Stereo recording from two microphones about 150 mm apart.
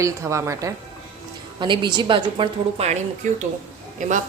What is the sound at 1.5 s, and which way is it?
A woman's voice, 30° right (ahead or behind).